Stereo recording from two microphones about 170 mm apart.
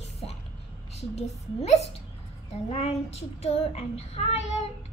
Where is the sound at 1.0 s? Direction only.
40° left (ahead or behind).